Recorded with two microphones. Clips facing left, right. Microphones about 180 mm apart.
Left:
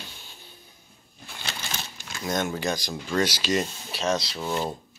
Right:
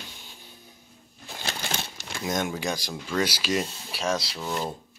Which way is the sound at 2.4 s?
10° right (ahead or behind).